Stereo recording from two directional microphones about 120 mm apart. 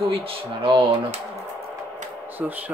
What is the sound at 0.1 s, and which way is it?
Speech, 50° right (ahead or behind).